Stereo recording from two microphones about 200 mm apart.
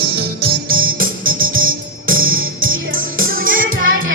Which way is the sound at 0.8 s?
90° right.